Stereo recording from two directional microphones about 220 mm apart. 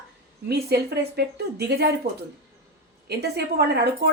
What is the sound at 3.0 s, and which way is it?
Speech, 45° right (ahead or behind).